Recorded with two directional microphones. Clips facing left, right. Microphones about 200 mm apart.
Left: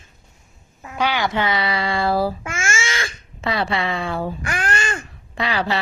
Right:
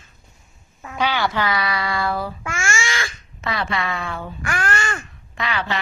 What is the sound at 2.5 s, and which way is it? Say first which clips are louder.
Babbling: even; 20° left (ahead or behind).